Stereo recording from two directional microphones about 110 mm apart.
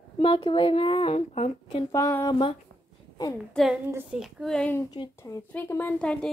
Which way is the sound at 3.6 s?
5° left (ahead or behind).